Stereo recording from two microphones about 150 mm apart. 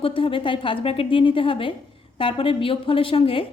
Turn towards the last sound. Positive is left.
turn(degrees=35)  # may be behind; listen again after turning